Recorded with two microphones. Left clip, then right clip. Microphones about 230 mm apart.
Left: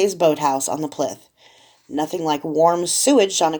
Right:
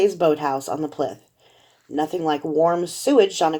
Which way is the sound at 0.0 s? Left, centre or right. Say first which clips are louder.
Left 2 dB; left.